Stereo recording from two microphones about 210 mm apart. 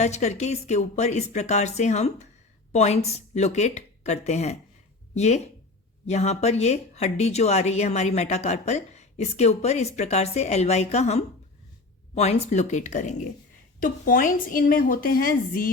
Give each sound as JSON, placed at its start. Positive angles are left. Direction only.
{"t": 0.0, "sound": "speech", "side_deg": 35}